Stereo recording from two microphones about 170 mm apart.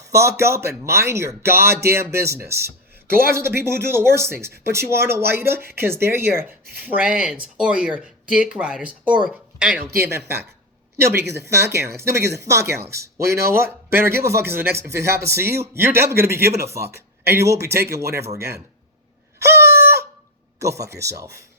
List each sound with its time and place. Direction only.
0.1 s speech: 15° right (ahead or behind)
19.5 s chicken: 15° right (ahead or behind)
20.6 s speech: 20° right (ahead or behind)